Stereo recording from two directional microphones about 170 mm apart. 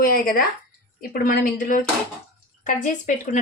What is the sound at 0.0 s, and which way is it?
A woman's voice, 60° left (ahead or behind).